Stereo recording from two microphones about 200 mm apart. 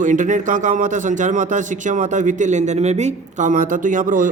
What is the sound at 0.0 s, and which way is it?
A man's voice, 40° right (ahead or behind).